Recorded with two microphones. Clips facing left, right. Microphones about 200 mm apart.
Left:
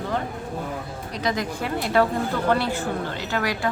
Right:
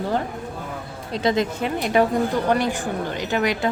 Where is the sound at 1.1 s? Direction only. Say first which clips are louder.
Right 5 dB; 25° right (ahead or behind).